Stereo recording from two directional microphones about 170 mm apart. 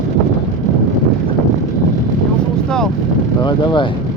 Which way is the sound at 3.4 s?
25° left (ahead or behind).